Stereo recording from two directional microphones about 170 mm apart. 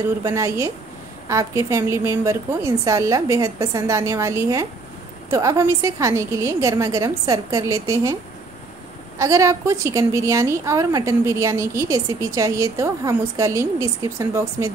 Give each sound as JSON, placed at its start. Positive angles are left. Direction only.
{"t": 0.2, "sound": "a woman's voice", "side_deg": -20}
{"t": 9.2, "sound": "a woman's voice", "side_deg": -20}